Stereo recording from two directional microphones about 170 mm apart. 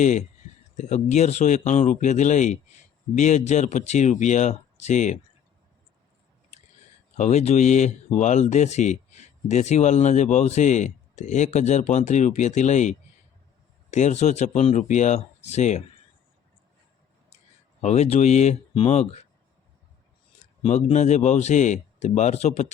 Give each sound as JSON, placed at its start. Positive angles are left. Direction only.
{"t": 0.0, "sound": "speech", "side_deg": 45}
{"t": 7.2, "sound": "speech", "side_deg": 40}
{"t": 17.8, "sound": "speech", "side_deg": 40}
{"t": 20.4, "sound": "speech", "side_deg": 40}